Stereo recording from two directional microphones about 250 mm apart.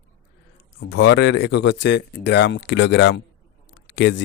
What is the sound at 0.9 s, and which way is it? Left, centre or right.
Speech, left.